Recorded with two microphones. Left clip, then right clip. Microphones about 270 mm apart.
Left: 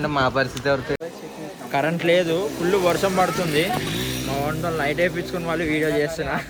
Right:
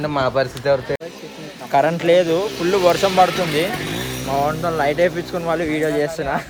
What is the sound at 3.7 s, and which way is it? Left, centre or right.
Speech, centre.